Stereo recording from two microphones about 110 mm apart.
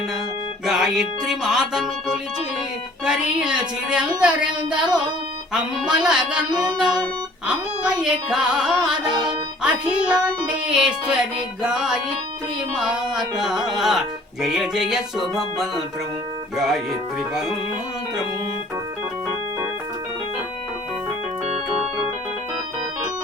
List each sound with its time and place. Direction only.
0.6 s music: 5° right (ahead or behind)
3.0 s speech: 5° right (ahead or behind)
6.7 s music: 5° right (ahead or behind)
9.6 s speech: 10° right (ahead or behind)
12.7 s music: 5° right (ahead or behind)
21.4 s organ: 75° right (ahead or behind)